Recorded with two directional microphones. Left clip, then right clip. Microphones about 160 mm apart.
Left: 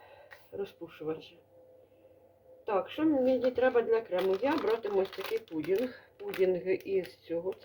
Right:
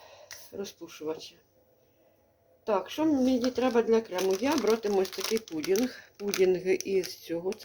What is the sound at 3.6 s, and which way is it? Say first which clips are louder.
Speech: right 2 dB; 80° right.